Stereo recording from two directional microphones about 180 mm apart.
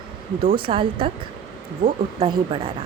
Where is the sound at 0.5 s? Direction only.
30° right (ahead or behind).